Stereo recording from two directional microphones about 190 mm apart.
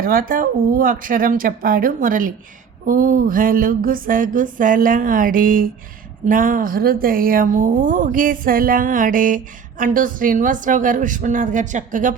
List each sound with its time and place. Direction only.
0.0 s speech: 50° right (ahead or behind)